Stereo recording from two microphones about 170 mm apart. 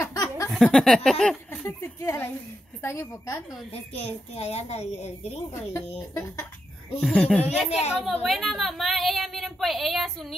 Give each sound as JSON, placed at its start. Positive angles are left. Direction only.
{"t": 0.0, "sound": "a sound", "side_deg": 20}
{"t": 0.5, "sound": "speech", "side_deg": 0}
{"t": 3.7, "sound": "a child's voice", "side_deg": 35}
{"t": 5.5, "sound": "speech", "side_deg": 15}
{"t": 7.4, "sound": "speech", "side_deg": -5}